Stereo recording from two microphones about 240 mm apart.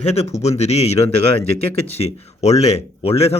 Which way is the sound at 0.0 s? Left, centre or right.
Left.